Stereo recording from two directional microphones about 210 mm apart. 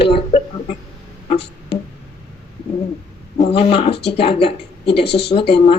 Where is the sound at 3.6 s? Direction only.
25° left (ahead or behind).